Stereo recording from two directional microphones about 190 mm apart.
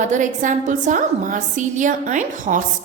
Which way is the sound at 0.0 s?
40° right (ahead or behind).